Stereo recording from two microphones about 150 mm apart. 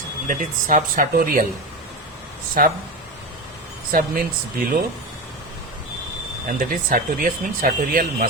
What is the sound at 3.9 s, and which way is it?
Speech, 70° right (ahead or behind).